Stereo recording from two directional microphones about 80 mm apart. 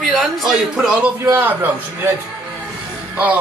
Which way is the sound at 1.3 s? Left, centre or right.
Right.